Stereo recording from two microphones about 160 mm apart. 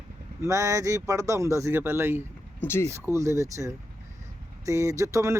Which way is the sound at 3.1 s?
20° right (ahead or behind).